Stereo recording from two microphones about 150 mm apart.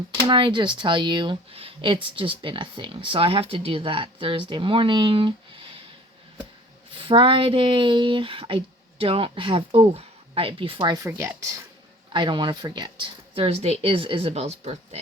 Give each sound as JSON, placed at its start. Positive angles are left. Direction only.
{"t": 0.3, "sound": "speech", "side_deg": -30}
{"t": 6.9, "sound": "speech", "side_deg": -35}
{"t": 12.1, "sound": "speech", "side_deg": -30}